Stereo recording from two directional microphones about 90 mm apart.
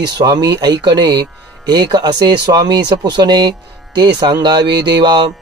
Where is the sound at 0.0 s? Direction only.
50° right (ahead or behind).